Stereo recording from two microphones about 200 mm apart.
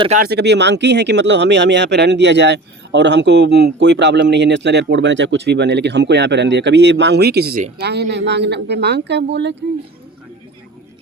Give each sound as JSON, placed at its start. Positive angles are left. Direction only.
{"t": 0.2, "sound": "speech", "side_deg": -55}